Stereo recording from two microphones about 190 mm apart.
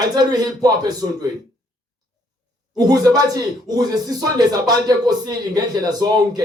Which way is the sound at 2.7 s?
20° right (ahead or behind).